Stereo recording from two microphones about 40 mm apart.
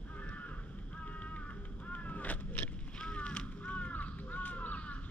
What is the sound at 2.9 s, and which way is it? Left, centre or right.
Crow, left.